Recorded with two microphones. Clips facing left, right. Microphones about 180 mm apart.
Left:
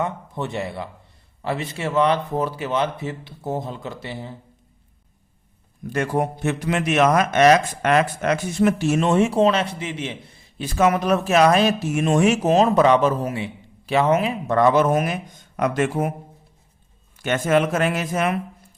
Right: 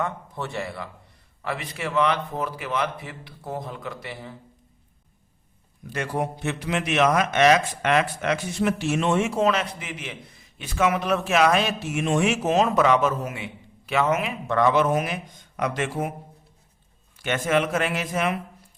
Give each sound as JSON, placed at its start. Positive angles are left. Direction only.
{"t": 0.0, "sound": "speech", "side_deg": 20}
{"t": 5.9, "sound": "a man's voice", "side_deg": 50}
{"t": 17.2, "sound": "speech", "side_deg": 45}